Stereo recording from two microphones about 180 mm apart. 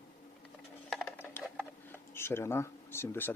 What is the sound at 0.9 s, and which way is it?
Music, 5° left (ahead or behind).